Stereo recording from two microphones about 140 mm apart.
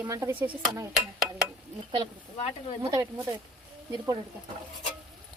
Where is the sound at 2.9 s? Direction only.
25° right (ahead or behind).